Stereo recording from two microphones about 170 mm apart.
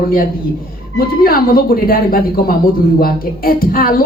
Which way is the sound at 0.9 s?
60° left (ahead or behind).